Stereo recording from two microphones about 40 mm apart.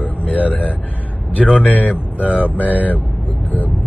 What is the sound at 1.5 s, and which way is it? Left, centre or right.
Speech, left.